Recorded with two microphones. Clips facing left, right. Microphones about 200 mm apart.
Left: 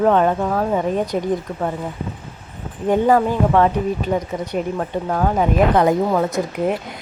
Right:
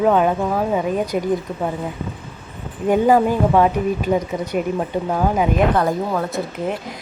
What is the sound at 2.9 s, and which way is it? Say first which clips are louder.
Speech: right 1 dB; 10° right (ahead or behind).